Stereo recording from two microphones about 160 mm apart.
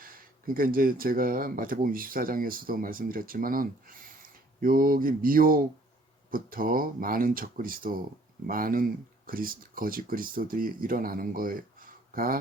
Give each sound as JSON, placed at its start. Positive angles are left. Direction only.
{"t": 0.0, "sound": "speech", "side_deg": -65}